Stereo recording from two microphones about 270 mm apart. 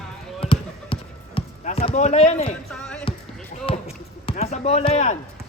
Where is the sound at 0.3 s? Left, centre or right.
Centre.